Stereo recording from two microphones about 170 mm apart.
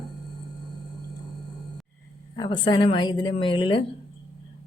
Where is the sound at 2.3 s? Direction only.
25° left (ahead or behind).